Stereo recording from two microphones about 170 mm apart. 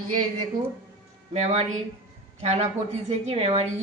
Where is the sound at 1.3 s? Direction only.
40° right (ahead or behind).